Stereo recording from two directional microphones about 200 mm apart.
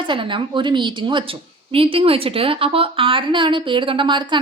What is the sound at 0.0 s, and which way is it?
A woman's voice, 25° right (ahead or behind).